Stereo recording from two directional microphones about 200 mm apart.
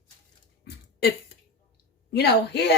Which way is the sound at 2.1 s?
55° left (ahead or behind).